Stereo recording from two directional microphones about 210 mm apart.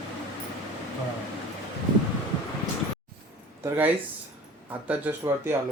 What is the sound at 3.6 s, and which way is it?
Speech, 10° right (ahead or behind).